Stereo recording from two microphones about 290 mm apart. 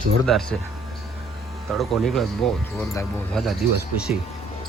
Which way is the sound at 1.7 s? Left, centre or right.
Centre.